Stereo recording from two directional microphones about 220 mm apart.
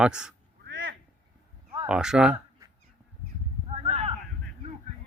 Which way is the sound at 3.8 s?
25° right (ahead or behind).